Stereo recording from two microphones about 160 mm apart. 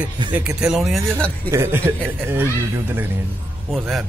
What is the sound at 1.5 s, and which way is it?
Speech, 15° right (ahead or behind).